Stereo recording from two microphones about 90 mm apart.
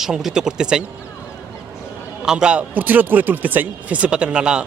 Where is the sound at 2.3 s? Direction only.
10° right (ahead or behind).